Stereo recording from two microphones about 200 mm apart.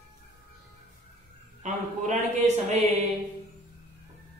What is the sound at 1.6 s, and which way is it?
A man's voice, 35° right (ahead or behind).